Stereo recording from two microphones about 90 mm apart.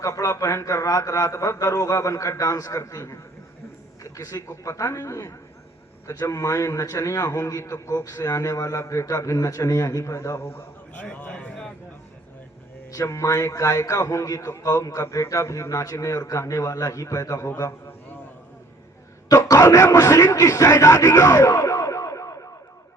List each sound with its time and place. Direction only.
0.0 s a man's voice: 35° left (ahead or behind)
10.9 s a sound: 15° left (ahead or behind)
12.9 s a man's voice: 35° left (ahead or behind)
19.3 s a man's voice: 35° left (ahead or behind)